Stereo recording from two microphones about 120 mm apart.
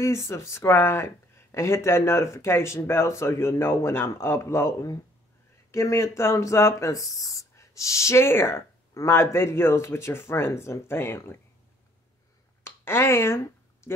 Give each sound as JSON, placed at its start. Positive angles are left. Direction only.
{"t": 0.0, "sound": "speech", "side_deg": 25}
{"t": 12.6, "sound": "speech", "side_deg": 20}